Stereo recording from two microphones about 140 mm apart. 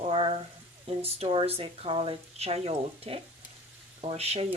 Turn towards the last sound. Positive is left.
turn(degrees=-45)  # may be behind; listen again after turning